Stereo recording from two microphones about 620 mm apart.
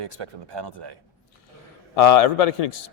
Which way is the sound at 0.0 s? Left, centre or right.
Right.